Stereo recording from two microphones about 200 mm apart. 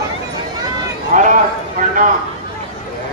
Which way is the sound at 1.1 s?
40° right (ahead or behind).